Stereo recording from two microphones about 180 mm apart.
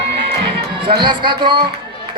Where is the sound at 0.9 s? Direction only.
25° right (ahead or behind).